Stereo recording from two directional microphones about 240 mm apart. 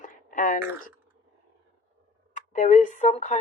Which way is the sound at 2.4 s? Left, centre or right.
Left.